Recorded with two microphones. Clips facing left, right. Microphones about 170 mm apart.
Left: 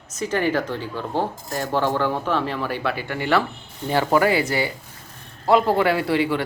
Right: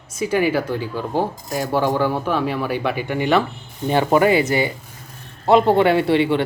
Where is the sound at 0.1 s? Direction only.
10° right (ahead or behind).